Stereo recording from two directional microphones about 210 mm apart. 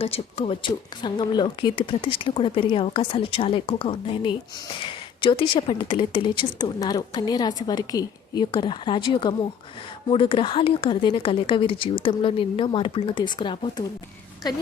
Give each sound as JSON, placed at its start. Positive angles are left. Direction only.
{"t": 0.0, "sound": "speech", "side_deg": 30}